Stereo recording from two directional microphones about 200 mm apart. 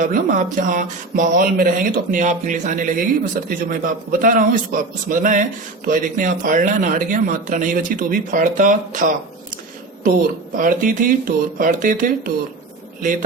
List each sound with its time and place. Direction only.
0.0 s a man's voice: 40° right (ahead or behind)
10.6 s a man's voice: 40° right (ahead or behind)